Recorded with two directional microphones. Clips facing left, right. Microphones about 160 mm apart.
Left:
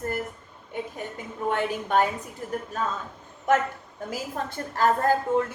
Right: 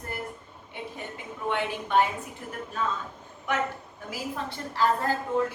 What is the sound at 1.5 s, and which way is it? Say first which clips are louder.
A woman's voice: left 3 dB; 45° left (ahead or behind).